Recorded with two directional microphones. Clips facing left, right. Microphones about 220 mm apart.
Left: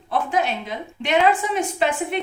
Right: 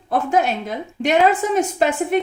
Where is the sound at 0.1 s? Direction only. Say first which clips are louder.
Right 4 dB; 45° right (ahead or behind).